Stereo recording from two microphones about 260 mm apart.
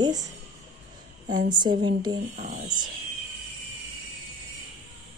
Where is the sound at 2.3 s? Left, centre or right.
Right.